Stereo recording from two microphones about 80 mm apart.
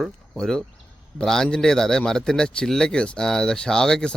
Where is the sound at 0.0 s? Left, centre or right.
Centre.